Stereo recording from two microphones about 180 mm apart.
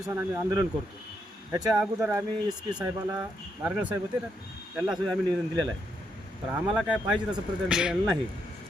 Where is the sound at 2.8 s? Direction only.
25° right (ahead or behind).